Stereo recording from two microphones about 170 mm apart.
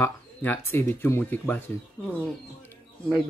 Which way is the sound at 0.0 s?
10° left (ahead or behind).